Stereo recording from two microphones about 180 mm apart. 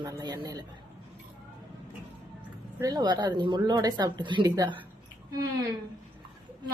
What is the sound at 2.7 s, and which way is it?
Speech, 20° right (ahead or behind).